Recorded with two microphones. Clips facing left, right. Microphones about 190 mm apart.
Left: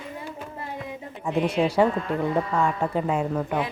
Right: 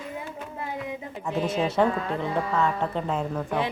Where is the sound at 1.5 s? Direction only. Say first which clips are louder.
Left 2 dB; 10° left (ahead or behind).